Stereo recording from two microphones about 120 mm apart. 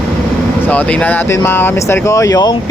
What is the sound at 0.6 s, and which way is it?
Speech, 10° left (ahead or behind).